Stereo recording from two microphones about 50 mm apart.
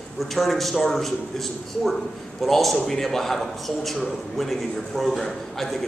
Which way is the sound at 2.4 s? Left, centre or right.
Centre.